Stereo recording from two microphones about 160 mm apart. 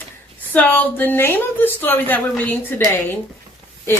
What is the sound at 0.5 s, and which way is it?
A woman's voice, 10° left (ahead or behind).